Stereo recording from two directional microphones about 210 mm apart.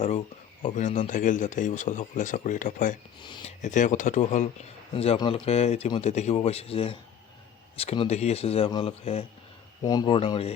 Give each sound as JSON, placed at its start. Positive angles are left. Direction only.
{"t": 0.0, "sound": "speech", "side_deg": 35}
{"t": 3.2, "sound": "a man's voice", "side_deg": 20}
{"t": 3.6, "sound": "a man's voice", "side_deg": 35}